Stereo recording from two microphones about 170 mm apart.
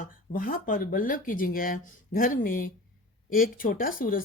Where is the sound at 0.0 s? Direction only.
55° left (ahead or behind).